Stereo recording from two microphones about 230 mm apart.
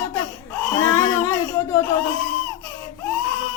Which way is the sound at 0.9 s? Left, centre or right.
Centre.